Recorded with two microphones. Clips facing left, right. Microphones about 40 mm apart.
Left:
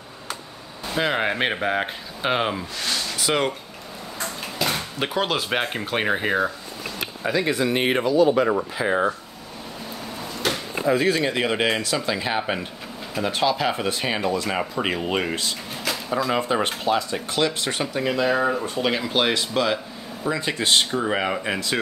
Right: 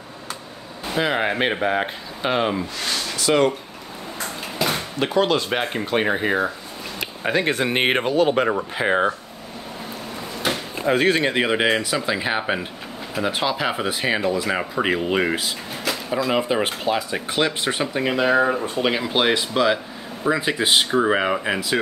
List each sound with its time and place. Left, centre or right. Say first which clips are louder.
0.9 s speech: right 1 dB; centre
4.9 s speech: right 7 dB; centre
7.2 s speech: right 1 dB; right
10.9 s speech: right 2 dB; right
11.1 s speech: right 3 dB; right
11.4 s speech: right 2 dB; centre
15.2 s speech: right 3 dB; centre
17.1 s speech: right 1 dB; right
18.6 s speech: right 2 dB; centre